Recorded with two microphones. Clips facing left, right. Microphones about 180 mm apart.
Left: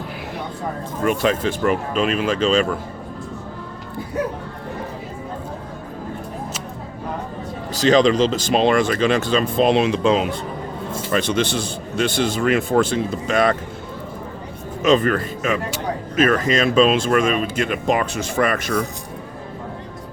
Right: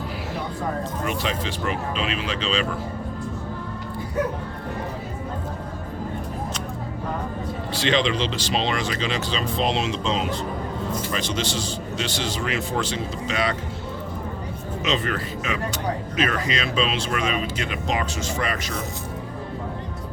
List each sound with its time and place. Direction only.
1.0 s speech: 50° left (ahead or behind)
7.7 s speech: 40° left (ahead or behind)
14.8 s speech: 50° left (ahead or behind)